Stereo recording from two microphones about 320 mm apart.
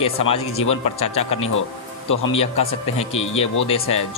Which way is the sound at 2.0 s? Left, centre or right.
Left.